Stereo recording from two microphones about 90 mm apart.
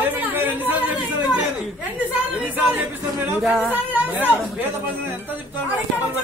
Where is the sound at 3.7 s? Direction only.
20° right (ahead or behind).